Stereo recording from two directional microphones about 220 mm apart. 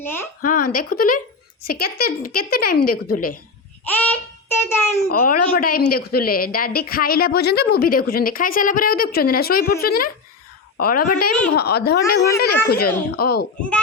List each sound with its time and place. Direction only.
0.0 s a woman's voice: 10° left (ahead or behind)
0.4 s a woman's voice: 40° left (ahead or behind)
3.9 s child singing: 10° left (ahead or behind)
5.0 s a woman's voice: 45° left (ahead or behind)
13.6 s a child's voice: 5° left (ahead or behind)